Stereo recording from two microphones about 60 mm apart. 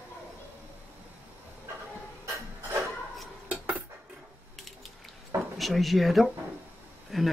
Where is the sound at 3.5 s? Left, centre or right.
Right.